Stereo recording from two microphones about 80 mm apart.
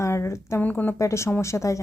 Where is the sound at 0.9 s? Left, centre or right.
Left.